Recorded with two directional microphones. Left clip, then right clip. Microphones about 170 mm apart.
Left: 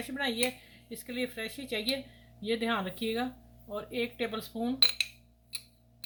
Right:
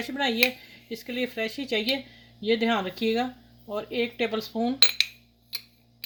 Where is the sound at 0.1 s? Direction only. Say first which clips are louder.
Right 8 dB; 55° right (ahead or behind).